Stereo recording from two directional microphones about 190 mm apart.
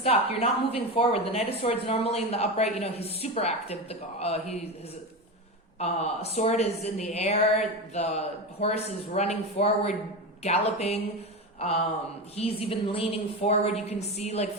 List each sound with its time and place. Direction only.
0.0 s speech: 30° left (ahead or behind)
5.8 s speech: 35° left (ahead or behind)
12.4 s speech: 30° left (ahead or behind)